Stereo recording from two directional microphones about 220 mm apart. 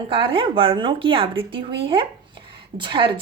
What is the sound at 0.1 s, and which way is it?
A woman's voice, 25° right (ahead or behind).